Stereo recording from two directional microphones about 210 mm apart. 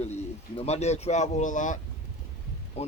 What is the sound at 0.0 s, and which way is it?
Speech, 30° left (ahead or behind).